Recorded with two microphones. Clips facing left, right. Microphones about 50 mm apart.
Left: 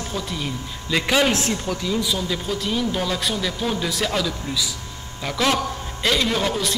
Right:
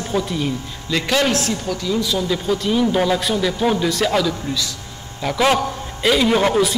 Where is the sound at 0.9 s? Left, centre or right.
Centre.